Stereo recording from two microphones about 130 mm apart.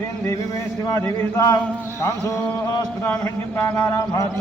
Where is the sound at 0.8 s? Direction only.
25° left (ahead or behind).